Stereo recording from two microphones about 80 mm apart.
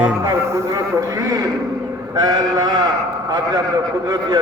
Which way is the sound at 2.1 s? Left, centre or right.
Right.